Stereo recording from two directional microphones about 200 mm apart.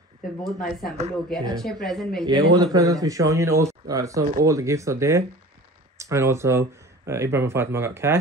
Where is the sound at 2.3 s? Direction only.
20° right (ahead or behind).